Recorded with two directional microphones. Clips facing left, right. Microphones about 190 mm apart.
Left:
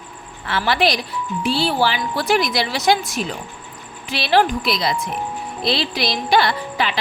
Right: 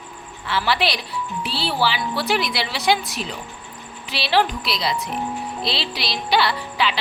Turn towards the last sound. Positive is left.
turn(degrees=45)  # may be behind; listen again after turning